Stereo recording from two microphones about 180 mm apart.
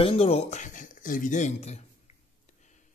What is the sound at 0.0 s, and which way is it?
Speech, 30° left (ahead or behind).